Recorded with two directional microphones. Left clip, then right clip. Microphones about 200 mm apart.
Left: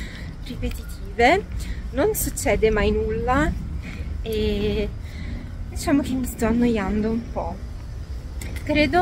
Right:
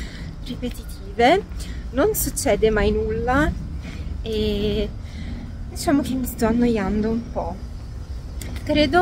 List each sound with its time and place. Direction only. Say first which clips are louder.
0.0 s a sound: even; 15° right (ahead or behind)
1.1 s speech: right 1 dB; 10° right (ahead or behind)
2.4 s speech: right 1 dB; 15° right (ahead or behind)
5.9 s speech: right 1 dB; 10° right (ahead or behind)
8.6 s speech: right 1 dB; 15° right (ahead or behind)